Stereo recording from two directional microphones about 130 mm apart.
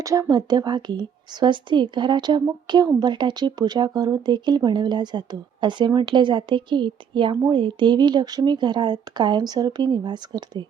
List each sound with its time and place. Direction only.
0.0 s speech: 25° right (ahead or behind)